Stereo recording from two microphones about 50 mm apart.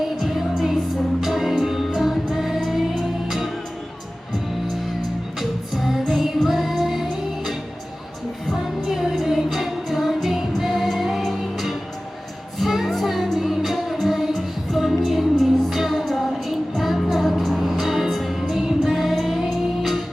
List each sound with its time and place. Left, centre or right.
0.2 s music: centre
5.4 s music: centre